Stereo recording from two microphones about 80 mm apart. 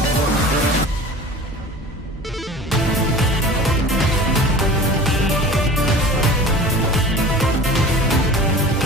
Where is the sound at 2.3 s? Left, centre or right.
Centre.